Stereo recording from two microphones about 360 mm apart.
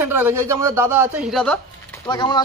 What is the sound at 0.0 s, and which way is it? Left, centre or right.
A man's voice, centre.